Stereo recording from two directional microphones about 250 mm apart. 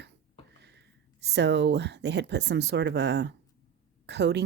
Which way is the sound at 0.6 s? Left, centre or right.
Right.